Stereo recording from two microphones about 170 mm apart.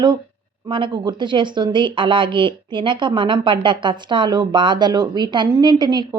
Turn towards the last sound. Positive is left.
turn(degrees=-25)  # may be behind; listen again after turning